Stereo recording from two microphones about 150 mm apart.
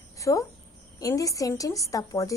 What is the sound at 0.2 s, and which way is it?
Speech, 20° left (ahead or behind).